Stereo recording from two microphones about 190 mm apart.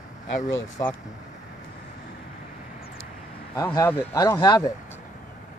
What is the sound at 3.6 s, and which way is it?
Speech, 20° left (ahead or behind).